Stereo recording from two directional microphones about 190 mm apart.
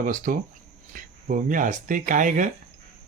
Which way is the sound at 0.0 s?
45° right (ahead or behind).